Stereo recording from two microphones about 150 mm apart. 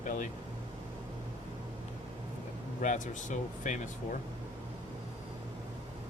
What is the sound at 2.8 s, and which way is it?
Speech, 55° left (ahead or behind).